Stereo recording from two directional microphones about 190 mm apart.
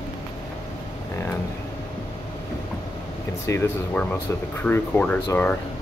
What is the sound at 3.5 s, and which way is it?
Speech, 15° left (ahead or behind).